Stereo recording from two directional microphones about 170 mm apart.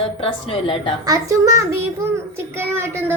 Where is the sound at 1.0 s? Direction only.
20° right (ahead or behind).